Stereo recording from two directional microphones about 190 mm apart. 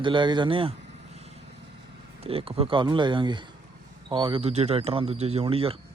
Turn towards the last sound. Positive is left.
turn(degrees=-30)  # may be behind; listen again after turning